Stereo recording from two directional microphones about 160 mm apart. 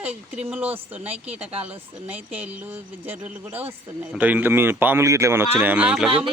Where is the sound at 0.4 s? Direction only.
10° right (ahead or behind).